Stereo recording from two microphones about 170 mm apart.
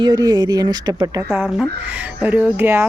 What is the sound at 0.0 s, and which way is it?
Speech, 25° right (ahead or behind).